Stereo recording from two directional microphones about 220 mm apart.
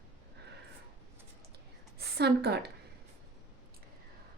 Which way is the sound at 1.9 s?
50° right (ahead or behind).